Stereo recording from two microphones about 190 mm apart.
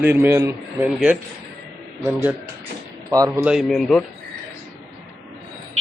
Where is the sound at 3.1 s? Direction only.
15° right (ahead or behind).